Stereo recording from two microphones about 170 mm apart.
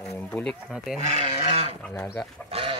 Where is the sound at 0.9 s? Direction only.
40° right (ahead or behind).